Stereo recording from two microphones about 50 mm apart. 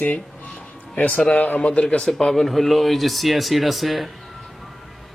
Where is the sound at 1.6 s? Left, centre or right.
Centre.